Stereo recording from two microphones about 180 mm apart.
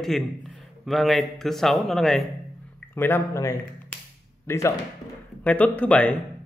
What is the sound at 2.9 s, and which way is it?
A man's voice, 10° left (ahead or behind).